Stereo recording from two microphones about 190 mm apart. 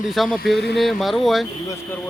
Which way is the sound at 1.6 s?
15° left (ahead or behind).